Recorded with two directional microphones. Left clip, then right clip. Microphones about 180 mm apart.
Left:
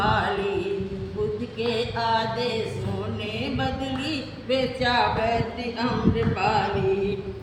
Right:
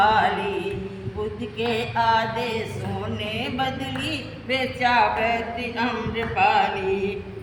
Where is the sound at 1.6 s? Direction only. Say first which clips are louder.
Right 3 dB; 20° right (ahead or behind).